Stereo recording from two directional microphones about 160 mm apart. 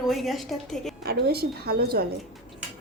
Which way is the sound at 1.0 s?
85° right.